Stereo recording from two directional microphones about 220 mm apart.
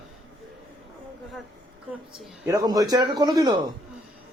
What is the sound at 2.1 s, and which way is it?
A man's voice, 15° right (ahead or behind).